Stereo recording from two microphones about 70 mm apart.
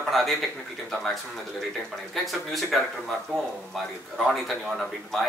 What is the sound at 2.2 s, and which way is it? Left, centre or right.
Speech, centre.